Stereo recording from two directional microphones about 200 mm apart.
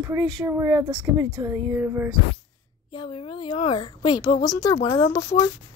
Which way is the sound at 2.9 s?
25° left (ahead or behind).